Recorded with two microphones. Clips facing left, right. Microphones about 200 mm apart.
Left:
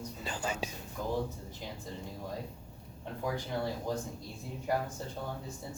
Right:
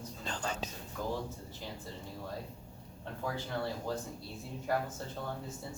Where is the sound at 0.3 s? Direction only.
10° left (ahead or behind).